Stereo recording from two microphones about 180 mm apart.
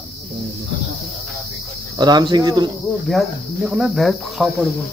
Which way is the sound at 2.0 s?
25° right (ahead or behind).